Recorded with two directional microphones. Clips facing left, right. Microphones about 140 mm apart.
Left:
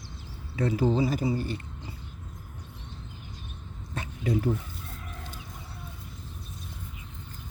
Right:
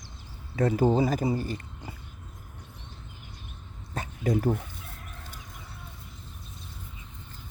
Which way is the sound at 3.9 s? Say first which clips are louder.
Right 1 dB; 45° right (ahead or behind).